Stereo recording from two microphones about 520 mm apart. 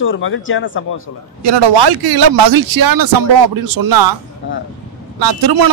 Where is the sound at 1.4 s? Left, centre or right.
Right.